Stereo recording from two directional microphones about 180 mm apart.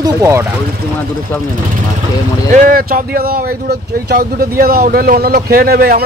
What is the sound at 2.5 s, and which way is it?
A man's voice, 50° right (ahead or behind).